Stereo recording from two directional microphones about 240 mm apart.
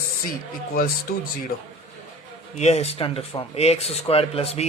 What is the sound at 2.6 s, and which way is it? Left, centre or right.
Speech, left.